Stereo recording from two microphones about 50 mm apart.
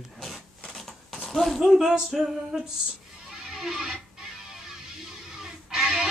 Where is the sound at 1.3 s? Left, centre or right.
Centre.